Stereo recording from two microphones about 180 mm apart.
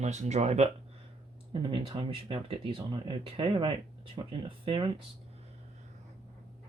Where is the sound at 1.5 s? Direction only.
30° right (ahead or behind).